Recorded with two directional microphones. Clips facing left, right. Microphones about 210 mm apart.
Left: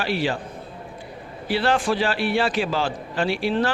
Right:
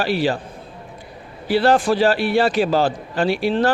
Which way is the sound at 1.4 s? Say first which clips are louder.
Right 5 dB; 40° right (ahead or behind).